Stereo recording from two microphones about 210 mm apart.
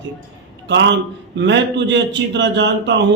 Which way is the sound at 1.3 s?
60° right (ahead or behind).